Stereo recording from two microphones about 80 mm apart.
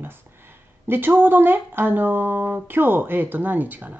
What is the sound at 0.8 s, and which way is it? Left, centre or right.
Speech, right.